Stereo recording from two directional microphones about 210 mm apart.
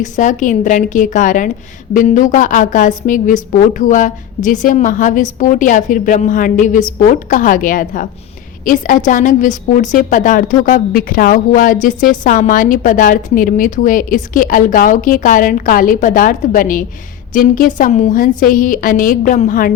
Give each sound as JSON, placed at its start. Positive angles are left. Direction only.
{"t": 0.0, "sound": "a woman's voice", "side_deg": 35}